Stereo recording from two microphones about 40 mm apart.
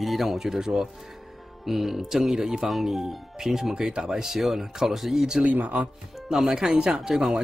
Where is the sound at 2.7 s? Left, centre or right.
Centre.